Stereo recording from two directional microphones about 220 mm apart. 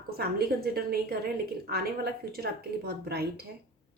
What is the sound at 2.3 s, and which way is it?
Speech, 45° right (ahead or behind).